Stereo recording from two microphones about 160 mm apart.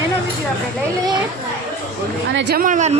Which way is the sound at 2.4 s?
70° right (ahead or behind).